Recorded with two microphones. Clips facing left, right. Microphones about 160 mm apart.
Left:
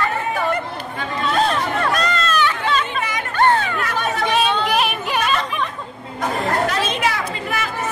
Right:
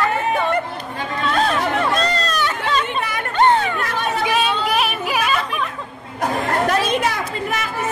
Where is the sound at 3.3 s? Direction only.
20° right (ahead or behind).